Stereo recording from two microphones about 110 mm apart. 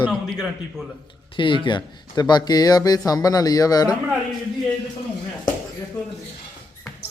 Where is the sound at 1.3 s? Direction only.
50° left (ahead or behind).